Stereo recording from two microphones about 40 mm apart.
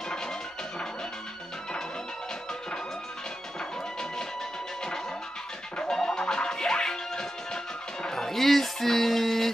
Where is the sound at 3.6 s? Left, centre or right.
Centre.